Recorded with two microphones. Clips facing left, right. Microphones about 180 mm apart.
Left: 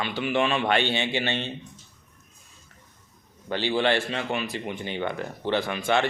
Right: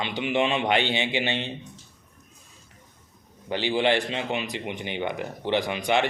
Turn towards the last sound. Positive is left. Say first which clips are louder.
# even
turn(degrees=-15)  # may be behind; listen again after turning